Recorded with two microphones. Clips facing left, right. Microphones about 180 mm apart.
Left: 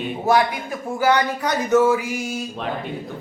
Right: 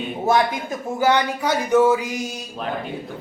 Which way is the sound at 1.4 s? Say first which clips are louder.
Right 2 dB; 10° right (ahead or behind).